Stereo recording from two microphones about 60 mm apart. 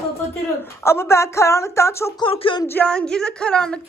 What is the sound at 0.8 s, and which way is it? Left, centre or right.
Speech, left.